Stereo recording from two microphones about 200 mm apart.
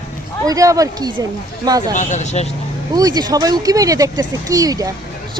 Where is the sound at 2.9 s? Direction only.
20° right (ahead or behind).